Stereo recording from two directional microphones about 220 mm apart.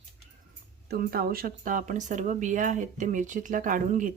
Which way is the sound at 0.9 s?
45° right (ahead or behind).